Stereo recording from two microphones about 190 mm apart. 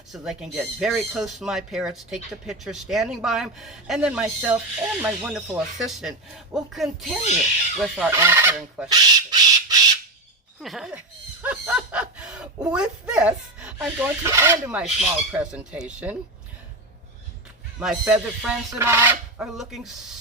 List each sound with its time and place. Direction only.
0.1 s speech: centre (ahead or behind)
8.1 s fowl: 15° right (ahead or behind)
8.9 s a sound: 20° right (ahead or behind)
10.6 s speech: centre (ahead or behind)
11.4 s a sound: 5° right (ahead or behind)
12.6 s speech: 5° right (ahead or behind)
17.7 s speech: 5° right (ahead or behind)